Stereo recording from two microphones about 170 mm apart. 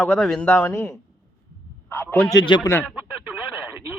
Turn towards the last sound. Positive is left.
turn(degrees=-10)  # may be behind; listen again after turning